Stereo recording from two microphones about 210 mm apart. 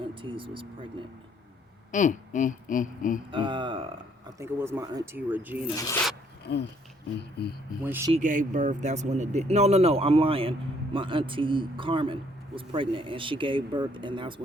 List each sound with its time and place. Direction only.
0.0 s speech: 25° right (ahead or behind)
1.9 s speech: 35° left (ahead or behind)
3.3 s speech: 25° right (ahead or behind)
4.4 s speech: 15° right (ahead or behind)
5.7 s speech: 15° left (ahead or behind)
6.4 s speech: 55° left (ahead or behind)
7.9 s speech: 10° right (ahead or behind)
8.1 s speech: 35° right (ahead or behind)